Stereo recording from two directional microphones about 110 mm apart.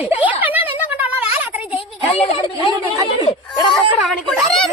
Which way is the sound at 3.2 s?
35° left (ahead or behind).